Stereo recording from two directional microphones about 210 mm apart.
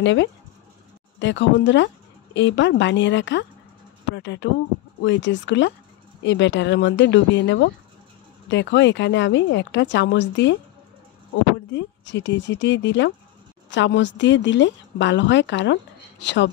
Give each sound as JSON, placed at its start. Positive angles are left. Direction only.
{"t": 0.0, "sound": "a woman's voice", "side_deg": 60}
{"t": 11.7, "sound": "a woman's voice", "side_deg": 60}